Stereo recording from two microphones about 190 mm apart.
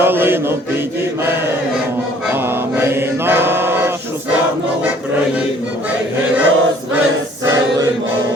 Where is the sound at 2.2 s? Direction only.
10° right (ahead or behind).